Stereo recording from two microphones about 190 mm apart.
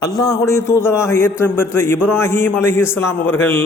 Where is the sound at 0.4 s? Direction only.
15° left (ahead or behind).